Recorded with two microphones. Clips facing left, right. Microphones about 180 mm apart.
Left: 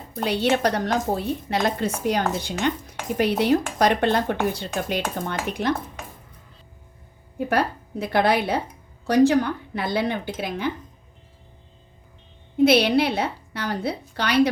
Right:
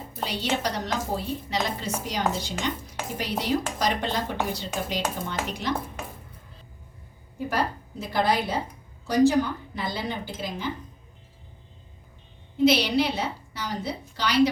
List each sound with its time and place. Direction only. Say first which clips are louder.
0.3 s a woman's voice: left 8 dB; 60° left (ahead or behind)
7.3 s a woman's voice: left 4 dB; 65° left (ahead or behind)
12.6 s a woman's voice: left 4 dB; 60° left (ahead or behind)